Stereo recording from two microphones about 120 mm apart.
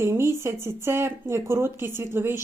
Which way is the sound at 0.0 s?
20° right (ahead or behind).